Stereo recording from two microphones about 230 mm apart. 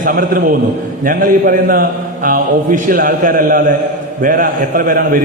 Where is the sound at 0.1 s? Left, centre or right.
Right.